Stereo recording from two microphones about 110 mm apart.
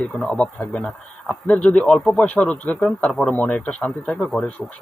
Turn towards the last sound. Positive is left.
turn(degrees=5)  # may be behind; listen again after turning